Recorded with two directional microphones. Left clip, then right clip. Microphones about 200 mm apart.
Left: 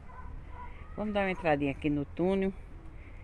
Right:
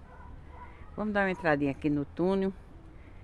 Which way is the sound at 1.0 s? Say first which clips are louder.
Right 2 dB; 20° right (ahead or behind).